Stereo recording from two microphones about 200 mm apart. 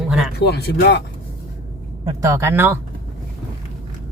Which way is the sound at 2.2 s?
15° right (ahead or behind).